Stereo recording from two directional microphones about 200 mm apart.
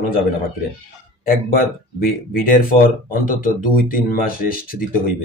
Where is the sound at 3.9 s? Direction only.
45° left (ahead or behind).